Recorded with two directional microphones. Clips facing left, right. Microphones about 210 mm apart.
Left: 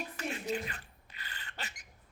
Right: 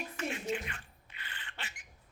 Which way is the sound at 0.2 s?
35° left (ahead or behind).